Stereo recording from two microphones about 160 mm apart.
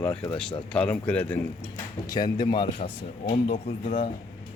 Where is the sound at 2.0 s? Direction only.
25° left (ahead or behind); by 4.1 s 45° left (ahead or behind).